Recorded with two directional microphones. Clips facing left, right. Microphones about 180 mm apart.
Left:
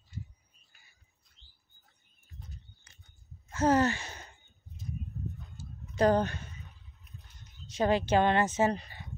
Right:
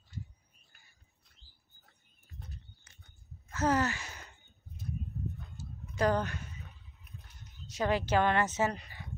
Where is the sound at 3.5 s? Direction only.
30° left (ahead or behind).